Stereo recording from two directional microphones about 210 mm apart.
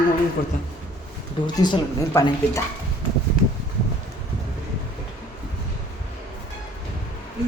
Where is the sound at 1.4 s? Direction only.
20° left (ahead or behind).